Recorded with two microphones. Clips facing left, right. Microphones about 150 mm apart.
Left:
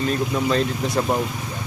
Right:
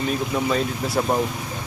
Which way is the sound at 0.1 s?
5° right (ahead or behind).